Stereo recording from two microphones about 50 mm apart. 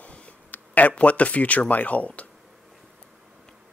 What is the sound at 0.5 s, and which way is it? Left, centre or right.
Speech, left.